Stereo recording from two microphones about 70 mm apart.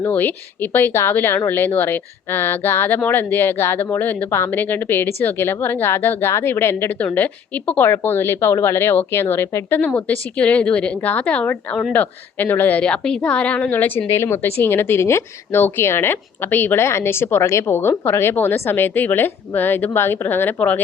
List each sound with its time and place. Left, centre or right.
0.1 s a woman's voice: left
7.0 s a woman's voice: left
9.8 s a woman's voice: centre
12.8 s a woman's voice: centre